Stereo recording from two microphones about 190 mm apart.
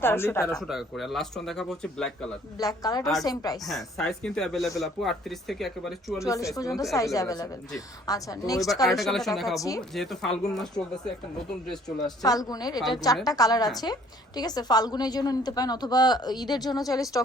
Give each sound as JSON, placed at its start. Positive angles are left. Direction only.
{"t": 0.0, "sound": "speech", "side_deg": 10}
{"t": 0.7, "sound": "speech", "side_deg": 0}
{"t": 2.6, "sound": "a woman's voice", "side_deg": 20}
{"t": 3.7, "sound": "speech", "side_deg": 0}
{"t": 6.1, "sound": "speech", "side_deg": 15}
{"t": 8.9, "sound": "speech", "side_deg": 0}
{"t": 9.6, "sound": "speech", "side_deg": 15}
{"t": 9.9, "sound": "speech", "side_deg": 0}
{"t": 11.9, "sound": "a woman's voice", "side_deg": 20}